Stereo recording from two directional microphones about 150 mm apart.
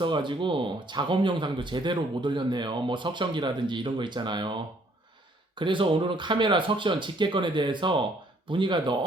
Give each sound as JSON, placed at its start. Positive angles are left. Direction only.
{"t": 0.0, "sound": "speech", "side_deg": -30}